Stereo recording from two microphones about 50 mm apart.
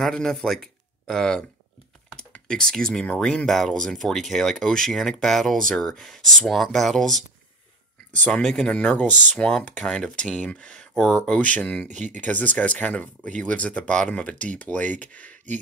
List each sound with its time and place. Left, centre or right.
0.0 s a man's voice: centre
2.4 s speech: centre
3.5 s speech: centre
8.3 s speech: centre
8.6 s speech: left